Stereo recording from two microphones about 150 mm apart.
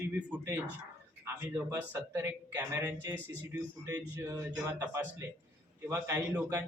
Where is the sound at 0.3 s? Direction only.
15° right (ahead or behind).